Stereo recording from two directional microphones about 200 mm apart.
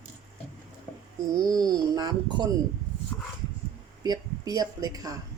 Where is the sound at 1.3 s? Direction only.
20° right (ahead or behind).